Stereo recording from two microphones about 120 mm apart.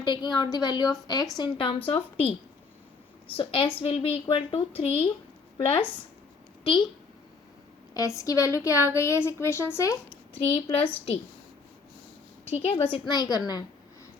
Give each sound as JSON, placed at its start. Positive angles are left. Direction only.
{"t": 0.0, "sound": "a woman's voice", "side_deg": 35}
{"t": 1.4, "sound": "a woman's voice", "side_deg": 45}
{"t": 3.3, "sound": "a woman's voice", "side_deg": 50}
{"t": 7.9, "sound": "a woman's voice", "side_deg": 25}
{"t": 10.7, "sound": "a woman's voice", "side_deg": 50}
{"t": 12.5, "sound": "a woman's voice", "side_deg": 60}
{"t": 12.7, "sound": "a woman's voice", "side_deg": 45}
{"t": 13.1, "sound": "a woman's voice", "side_deg": 35}